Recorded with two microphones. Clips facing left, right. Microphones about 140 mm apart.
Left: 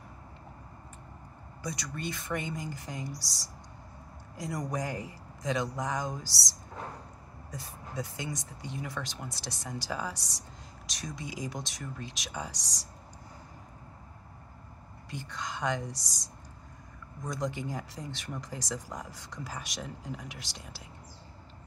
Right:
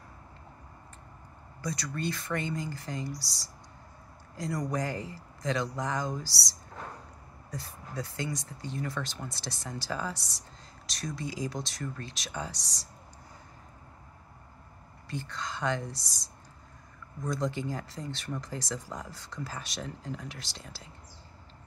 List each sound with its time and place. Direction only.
1.6 s speech: 15° left (ahead or behind)
7.5 s speech: 20° left (ahead or behind)
15.0 s speech: 15° left (ahead or behind)